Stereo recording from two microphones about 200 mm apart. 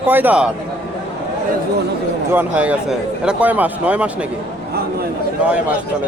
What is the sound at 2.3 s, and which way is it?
Speech, 10° right (ahead or behind).